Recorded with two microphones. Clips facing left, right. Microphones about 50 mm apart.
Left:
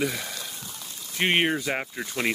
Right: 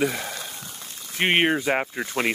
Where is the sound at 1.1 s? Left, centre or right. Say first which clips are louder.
Right 3 dB; centre.